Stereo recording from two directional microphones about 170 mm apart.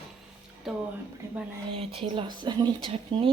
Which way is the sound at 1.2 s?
15° right (ahead or behind).